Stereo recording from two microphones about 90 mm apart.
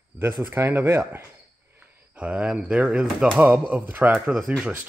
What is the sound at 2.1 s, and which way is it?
Speech, 15° right (ahead or behind).